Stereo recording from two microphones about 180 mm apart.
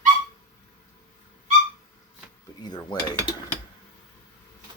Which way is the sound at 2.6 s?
20° left (ahead or behind).